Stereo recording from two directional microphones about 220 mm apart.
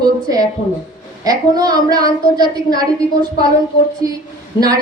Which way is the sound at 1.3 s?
15° right (ahead or behind).